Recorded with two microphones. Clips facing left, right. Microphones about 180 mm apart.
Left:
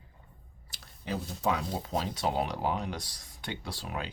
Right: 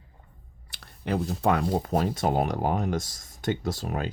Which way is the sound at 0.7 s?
60° right (ahead or behind).